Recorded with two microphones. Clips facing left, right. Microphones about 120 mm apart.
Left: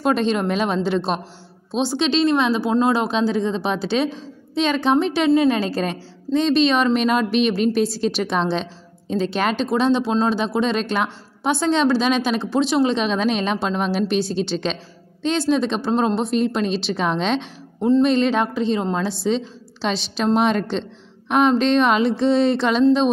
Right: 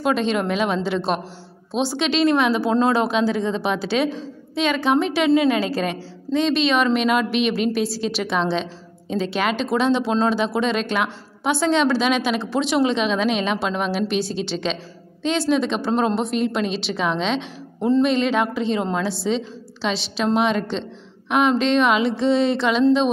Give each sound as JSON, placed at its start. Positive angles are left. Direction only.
{"t": 0.0, "sound": "speech", "side_deg": 40}
{"t": 1.9, "sound": "a woman's voice", "side_deg": 25}
{"t": 9.8, "sound": "speech", "side_deg": 15}
{"t": 10.6, "sound": "speech", "side_deg": 35}
{"t": 15.9, "sound": "a woman's voice", "side_deg": 25}
{"t": 16.3, "sound": "a woman's voice", "side_deg": 35}